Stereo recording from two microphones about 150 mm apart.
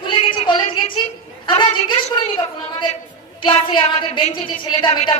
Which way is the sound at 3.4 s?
35° left (ahead or behind).